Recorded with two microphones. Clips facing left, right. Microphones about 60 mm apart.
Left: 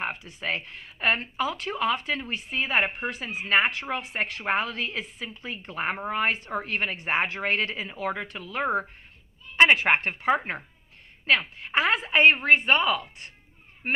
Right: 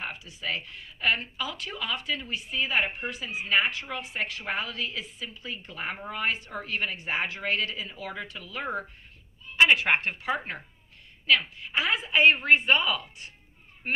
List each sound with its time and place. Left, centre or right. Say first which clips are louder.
0.0 s a woman's voice: left 4 dB; left